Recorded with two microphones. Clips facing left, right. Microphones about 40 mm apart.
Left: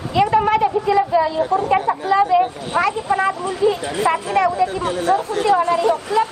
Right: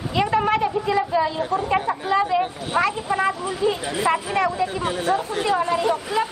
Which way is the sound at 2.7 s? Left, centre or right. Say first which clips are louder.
Left 3 dB; centre.